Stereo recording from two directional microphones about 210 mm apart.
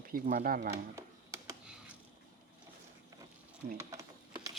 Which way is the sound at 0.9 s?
15° right (ahead or behind).